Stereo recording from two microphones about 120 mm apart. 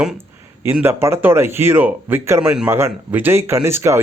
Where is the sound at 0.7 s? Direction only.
20° right (ahead or behind).